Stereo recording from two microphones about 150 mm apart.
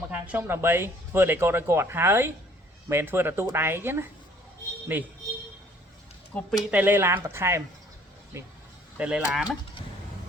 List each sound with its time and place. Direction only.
0.1 s speech: 10° right (ahead or behind)
6.3 s speech: 5° left (ahead or behind)
6.7 s speech: 10° right (ahead or behind)